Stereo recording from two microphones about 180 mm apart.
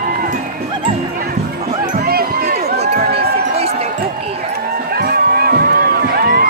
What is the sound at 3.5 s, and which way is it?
Basketball bounce, 35° right (ahead or behind).